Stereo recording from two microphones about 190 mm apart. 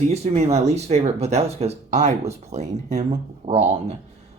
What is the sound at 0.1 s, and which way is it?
Speech, 35° right (ahead or behind).